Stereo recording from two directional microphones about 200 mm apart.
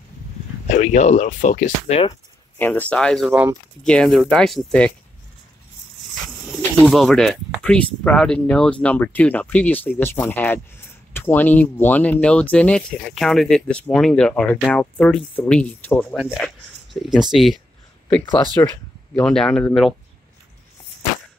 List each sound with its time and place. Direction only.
0.7 s speech: 35° left (ahead or behind)
2.6 s speech: 10° left (ahead or behind)
6.2 s bird: centre (ahead or behind)
6.9 s speech: centre (ahead or behind)
18.3 s speech: 20° left (ahead or behind)
19.1 s speech: 5° left (ahead or behind)